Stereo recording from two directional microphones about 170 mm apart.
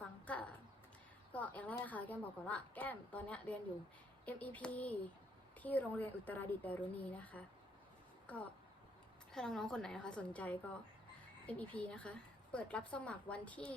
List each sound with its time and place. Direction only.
0.0 s a sound: 10° left (ahead or behind)
1.3 s speech: 10° left (ahead or behind)
9.3 s a woman's voice: 5° left (ahead or behind)